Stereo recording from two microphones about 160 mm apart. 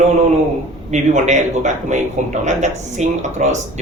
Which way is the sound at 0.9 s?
50° right (ahead or behind).